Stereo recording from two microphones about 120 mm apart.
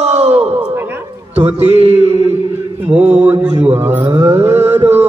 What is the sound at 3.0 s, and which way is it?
Mantra, 15° right (ahead or behind).